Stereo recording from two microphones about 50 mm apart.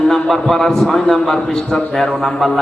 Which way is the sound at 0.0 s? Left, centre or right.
Centre.